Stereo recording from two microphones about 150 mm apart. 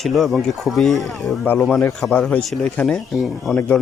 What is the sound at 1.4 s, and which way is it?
Speech, 15° left (ahead or behind).